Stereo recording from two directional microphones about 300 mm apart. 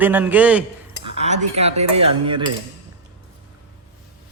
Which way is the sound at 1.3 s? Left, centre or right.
Right.